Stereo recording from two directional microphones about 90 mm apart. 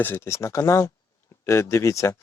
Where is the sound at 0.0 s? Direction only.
30° left (ahead or behind).